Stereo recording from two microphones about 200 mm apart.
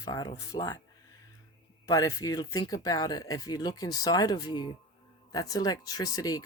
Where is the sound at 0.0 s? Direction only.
20° left (ahead or behind).